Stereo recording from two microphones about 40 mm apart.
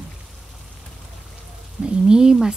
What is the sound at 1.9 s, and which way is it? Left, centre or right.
Speech, right.